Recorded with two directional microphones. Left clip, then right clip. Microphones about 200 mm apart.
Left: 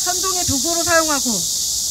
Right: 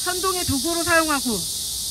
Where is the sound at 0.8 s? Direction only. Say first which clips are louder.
Left 2 dB; 30° left (ahead or behind).